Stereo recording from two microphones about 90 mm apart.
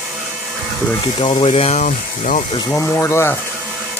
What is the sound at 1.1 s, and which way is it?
Speech, 90° left.